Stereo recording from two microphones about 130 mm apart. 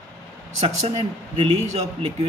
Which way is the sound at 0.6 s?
55° right (ahead or behind).